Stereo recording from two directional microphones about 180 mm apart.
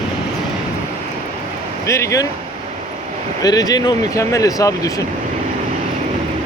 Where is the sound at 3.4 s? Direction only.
20° left (ahead or behind).